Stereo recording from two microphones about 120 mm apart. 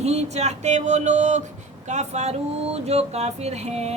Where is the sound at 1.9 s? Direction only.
70° right (ahead or behind).